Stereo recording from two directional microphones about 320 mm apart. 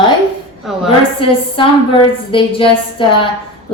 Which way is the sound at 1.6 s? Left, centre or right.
Centre.